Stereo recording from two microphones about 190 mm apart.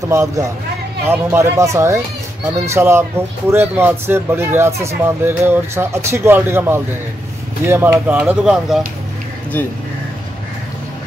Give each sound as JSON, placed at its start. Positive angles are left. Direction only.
{"t": 0.1, "sound": "speech", "side_deg": -15}